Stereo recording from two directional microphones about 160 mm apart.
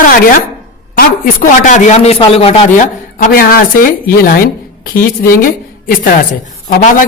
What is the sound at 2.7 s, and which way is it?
Speech, 55° left (ahead or behind).